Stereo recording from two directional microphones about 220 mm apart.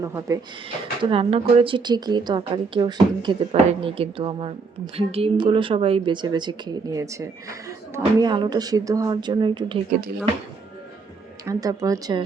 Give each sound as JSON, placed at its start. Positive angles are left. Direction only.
{"t": 0.0, "sound": "speech", "side_deg": -15}
{"t": 1.0, "sound": "a woman's voice", "side_deg": -25}
{"t": 11.4, "sound": "speech", "side_deg": -15}